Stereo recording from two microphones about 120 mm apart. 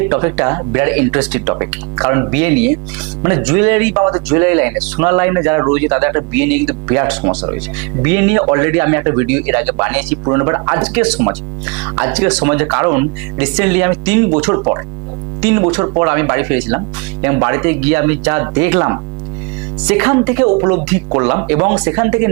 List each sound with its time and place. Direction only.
0.0 s speech: 20° right (ahead or behind)
10.2 s speech: 25° right (ahead or behind)
10.8 s speech: 10° right (ahead or behind)
14.5 s speech: 25° right (ahead or behind)